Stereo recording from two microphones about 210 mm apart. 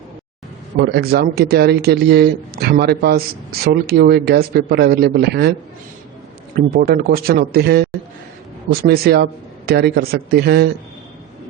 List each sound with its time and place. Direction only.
0.8 s speech: 50° right (ahead or behind)
6.7 s speech: 45° right (ahead or behind)